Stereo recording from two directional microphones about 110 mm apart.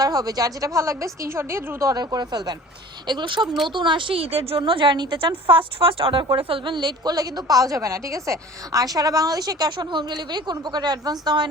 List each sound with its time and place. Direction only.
0.0 s a woman's voice: 35° right (ahead or behind)
1.9 s a woman's voice: 35° right (ahead or behind)